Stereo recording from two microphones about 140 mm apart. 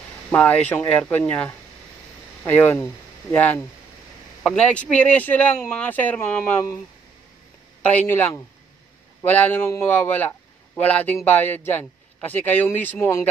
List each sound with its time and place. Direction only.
0.3 s a man's voice: 10° left (ahead or behind)
7.8 s a man's voice: 10° left (ahead or behind)